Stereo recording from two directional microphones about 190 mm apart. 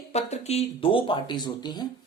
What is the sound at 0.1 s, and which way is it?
Speech, 35° left (ahead or behind).